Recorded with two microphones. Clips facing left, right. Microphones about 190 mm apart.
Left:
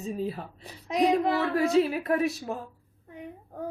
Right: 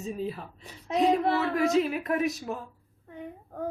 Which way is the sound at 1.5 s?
35° left (ahead or behind).